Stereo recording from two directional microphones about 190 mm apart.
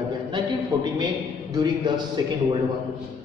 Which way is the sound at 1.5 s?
20° right (ahead or behind).